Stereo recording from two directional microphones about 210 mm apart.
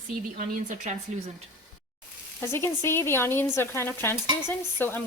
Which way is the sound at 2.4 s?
10° left (ahead or behind).